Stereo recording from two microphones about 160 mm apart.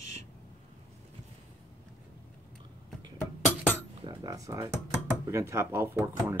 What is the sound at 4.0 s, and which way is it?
Cutlery, 25° right (ahead or behind).